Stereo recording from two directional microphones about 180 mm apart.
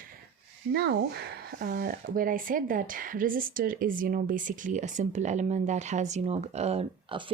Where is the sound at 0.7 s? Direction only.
65° right (ahead or behind).